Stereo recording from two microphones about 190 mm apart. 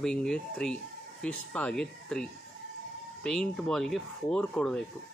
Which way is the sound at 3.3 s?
5° left (ahead or behind).